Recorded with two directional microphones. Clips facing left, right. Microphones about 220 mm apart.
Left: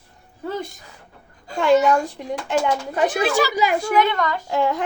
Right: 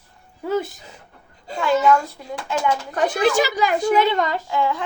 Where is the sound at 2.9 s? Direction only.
10° left (ahead or behind).